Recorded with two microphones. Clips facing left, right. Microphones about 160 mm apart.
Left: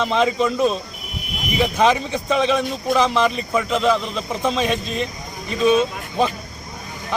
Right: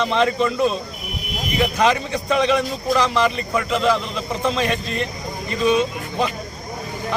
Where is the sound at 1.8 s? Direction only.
5° left (ahead or behind).